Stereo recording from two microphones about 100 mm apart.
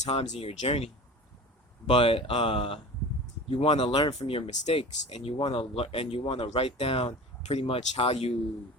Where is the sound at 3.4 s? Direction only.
80° left.